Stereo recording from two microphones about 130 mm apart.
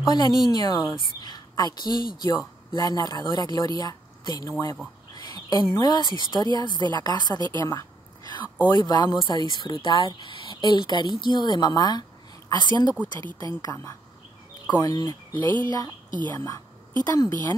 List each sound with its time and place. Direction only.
0.0 s a woman's voice: 30° left (ahead or behind)
7.6 s a sound: 25° left (ahead or behind)
8.6 s speech: 30° left (ahead or behind)
15.4 s speech: 35° right (ahead or behind)
16.3 s speech: 25° left (ahead or behind)